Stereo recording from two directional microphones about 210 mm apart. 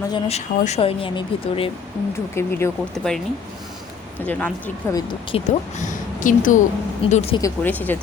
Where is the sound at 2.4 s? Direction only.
10° left (ahead or behind).